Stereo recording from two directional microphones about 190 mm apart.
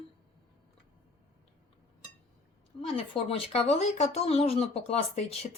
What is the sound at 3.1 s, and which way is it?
Speech, 30° left (ahead or behind).